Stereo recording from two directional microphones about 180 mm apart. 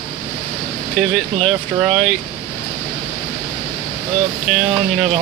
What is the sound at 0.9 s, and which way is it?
Speech, 5° left (ahead or behind).